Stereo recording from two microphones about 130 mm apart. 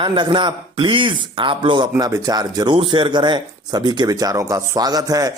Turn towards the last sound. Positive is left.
turn(degrees=-30)  # may be behind; listen again after turning